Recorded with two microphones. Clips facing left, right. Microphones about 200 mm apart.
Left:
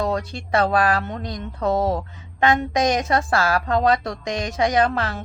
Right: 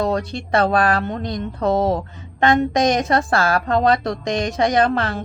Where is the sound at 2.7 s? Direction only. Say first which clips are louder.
Right 3 dB; 10° left (ahead or behind).